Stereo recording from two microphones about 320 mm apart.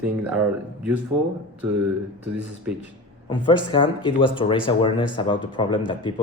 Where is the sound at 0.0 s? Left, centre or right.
Centre.